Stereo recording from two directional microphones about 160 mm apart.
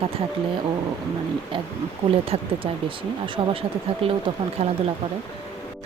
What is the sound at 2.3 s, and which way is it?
Speech, 35° right (ahead or behind).